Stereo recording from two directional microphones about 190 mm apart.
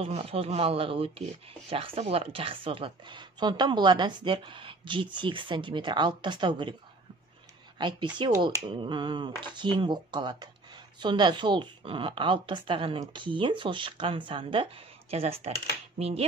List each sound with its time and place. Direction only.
0.0 s a woman's voice: 30° right (ahead or behind)
7.8 s a woman's voice: 25° right (ahead or behind)
16.0 s finger snapping: 30° right (ahead or behind)